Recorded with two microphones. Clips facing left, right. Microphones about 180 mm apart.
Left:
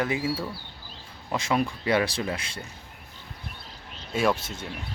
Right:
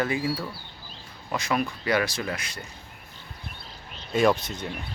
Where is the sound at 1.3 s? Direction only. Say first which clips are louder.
Left 1 dB; 25° left (ahead or behind).